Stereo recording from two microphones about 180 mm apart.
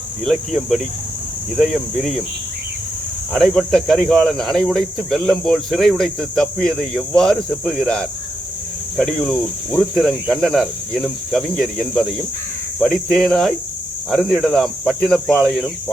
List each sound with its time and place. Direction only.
0.3 s speech: centre (ahead or behind)
3.3 s speech: centre (ahead or behind)